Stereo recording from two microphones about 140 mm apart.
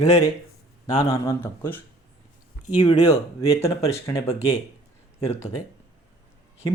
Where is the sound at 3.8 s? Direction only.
20° left (ahead or behind).